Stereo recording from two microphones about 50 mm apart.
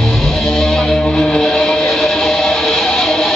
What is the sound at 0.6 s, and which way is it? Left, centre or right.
Music, centre.